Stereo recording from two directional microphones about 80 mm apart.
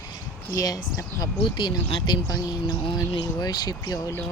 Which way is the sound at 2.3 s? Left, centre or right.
Left.